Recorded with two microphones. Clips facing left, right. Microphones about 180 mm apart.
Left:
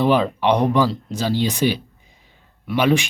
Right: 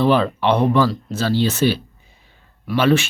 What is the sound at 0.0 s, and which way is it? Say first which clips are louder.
Speech: right 1 dB; 15° left (ahead or behind).